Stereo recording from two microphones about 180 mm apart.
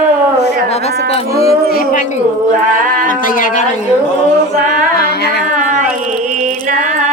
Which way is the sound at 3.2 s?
50° left (ahead or behind).